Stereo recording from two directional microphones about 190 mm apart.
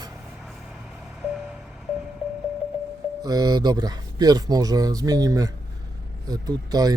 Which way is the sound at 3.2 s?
20° right (ahead or behind).